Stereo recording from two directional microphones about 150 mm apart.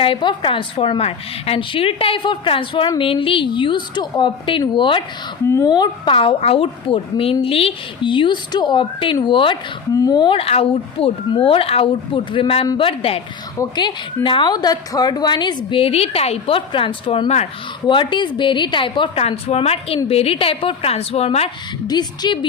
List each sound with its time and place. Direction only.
0.0 s a woman's voice: 35° left (ahead or behind)
17.8 s a woman's voice: 30° left (ahead or behind)
21.8 s a woman's voice: 30° left (ahead or behind)